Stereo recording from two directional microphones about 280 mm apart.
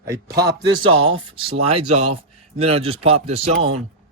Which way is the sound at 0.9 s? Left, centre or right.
Right.